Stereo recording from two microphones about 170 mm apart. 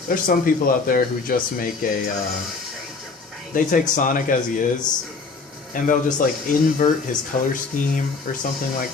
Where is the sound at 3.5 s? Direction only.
50° left (ahead or behind).